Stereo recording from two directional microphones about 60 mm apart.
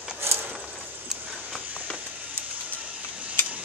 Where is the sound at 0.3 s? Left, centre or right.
Right.